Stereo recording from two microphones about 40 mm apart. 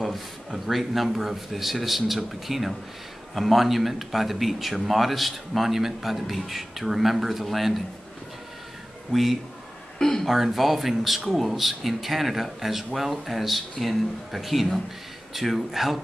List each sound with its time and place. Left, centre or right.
0.0 s speech: centre
9.1 s speech: centre
9.9 s a sound: centre
10.2 s speech: centre